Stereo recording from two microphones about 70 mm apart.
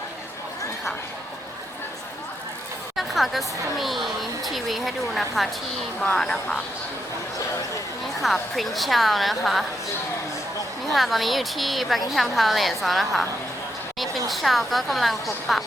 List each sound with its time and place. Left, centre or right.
2.9 s speech: centre
8.2 s speech: centre
10.9 s speech: centre
14.3 s speech: centre